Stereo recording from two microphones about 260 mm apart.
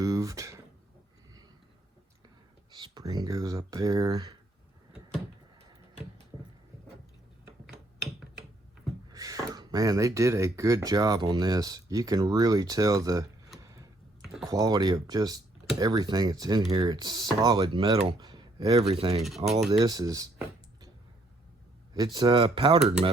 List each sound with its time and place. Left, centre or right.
0.0 s a sound: centre
2.7 s speech: centre
9.0 s speech: centre
13.6 s a sound: centre
14.4 s speech: centre
21.9 s speech: centre